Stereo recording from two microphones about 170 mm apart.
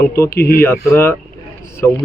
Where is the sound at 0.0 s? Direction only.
15° left (ahead or behind).